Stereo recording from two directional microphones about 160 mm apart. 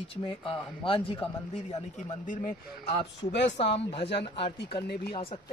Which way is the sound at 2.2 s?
55° left (ahead or behind).